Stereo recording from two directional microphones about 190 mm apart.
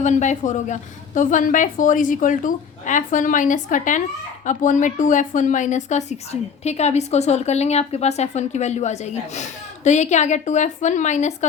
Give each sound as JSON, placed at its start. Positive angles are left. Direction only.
{"t": 0.0, "sound": "a woman's voice", "side_deg": 40}